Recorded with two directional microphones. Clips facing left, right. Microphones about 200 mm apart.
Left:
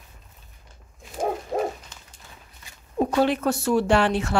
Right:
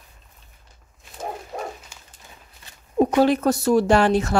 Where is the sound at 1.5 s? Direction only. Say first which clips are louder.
Left 8 dB; 40° left (ahead or behind).